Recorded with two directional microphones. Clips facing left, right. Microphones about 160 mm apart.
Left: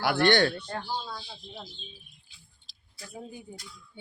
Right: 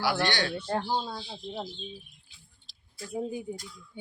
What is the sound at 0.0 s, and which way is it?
Speech, 55° left (ahead or behind).